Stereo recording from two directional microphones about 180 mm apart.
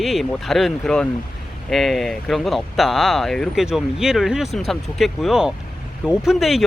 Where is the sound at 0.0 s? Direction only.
Centre (ahead or behind).